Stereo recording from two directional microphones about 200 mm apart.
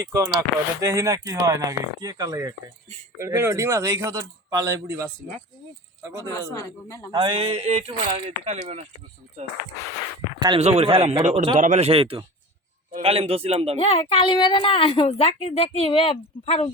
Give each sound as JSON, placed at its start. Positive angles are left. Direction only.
{"t": 0.0, "sound": "speech", "side_deg": -15}
{"t": 6.2, "sound": "a man's voice", "side_deg": 15}
{"t": 7.1, "sound": "a man's voice", "side_deg": -25}
{"t": 10.6, "sound": "a man's voice", "side_deg": -30}
{"t": 13.7, "sound": "speech", "side_deg": 30}